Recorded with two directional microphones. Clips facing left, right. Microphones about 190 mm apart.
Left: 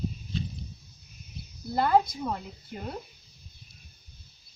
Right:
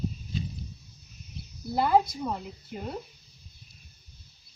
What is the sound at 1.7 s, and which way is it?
A woman's voice, 5° right (ahead or behind).